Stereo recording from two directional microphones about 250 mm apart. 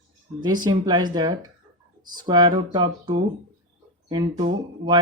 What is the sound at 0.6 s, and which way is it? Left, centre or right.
Speech, centre.